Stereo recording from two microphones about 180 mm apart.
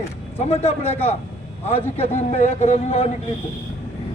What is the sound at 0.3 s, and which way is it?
Speech, 35° left (ahead or behind).